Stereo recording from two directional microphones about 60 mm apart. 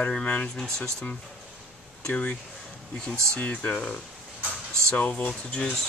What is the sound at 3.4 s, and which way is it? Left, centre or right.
Speech, left.